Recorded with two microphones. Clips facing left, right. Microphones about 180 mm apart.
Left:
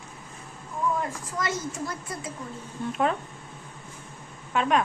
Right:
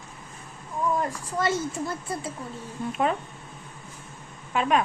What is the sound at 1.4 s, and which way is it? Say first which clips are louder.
Speech: right 4 dB; 30° right (ahead or behind).